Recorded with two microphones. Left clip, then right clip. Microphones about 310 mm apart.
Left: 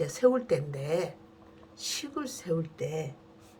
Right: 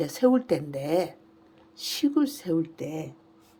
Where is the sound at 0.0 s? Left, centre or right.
Right.